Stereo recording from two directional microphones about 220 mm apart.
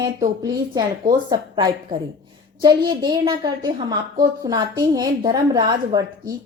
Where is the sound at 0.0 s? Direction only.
20° right (ahead or behind).